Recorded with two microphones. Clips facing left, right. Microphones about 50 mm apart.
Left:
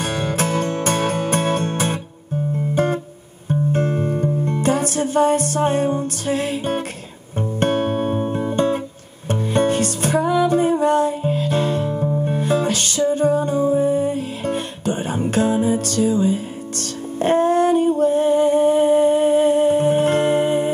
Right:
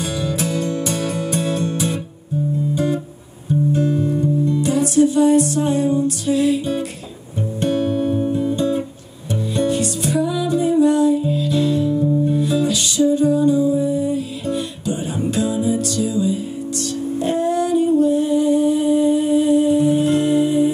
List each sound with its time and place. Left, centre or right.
0.0 s music: left